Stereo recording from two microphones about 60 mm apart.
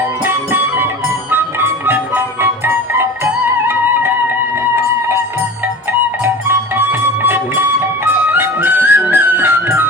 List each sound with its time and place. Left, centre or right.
0.3 s music: right
6.2 s music: right